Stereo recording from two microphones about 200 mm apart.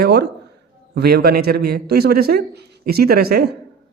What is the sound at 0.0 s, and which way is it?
A man's voice, 55° right (ahead or behind).